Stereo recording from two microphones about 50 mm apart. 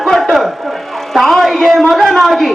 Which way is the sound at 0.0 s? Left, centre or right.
Centre.